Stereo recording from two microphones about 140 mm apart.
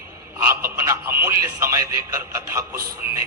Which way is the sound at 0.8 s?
20° right (ahead or behind).